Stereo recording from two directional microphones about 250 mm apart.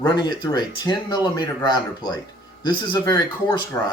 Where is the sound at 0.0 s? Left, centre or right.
Centre.